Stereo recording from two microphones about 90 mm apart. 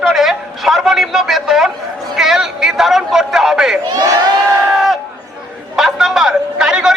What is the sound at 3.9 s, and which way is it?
Speech, 45° right (ahead or behind).